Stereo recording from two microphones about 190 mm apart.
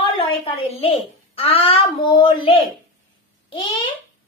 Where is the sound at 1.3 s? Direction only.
30° left (ahead or behind).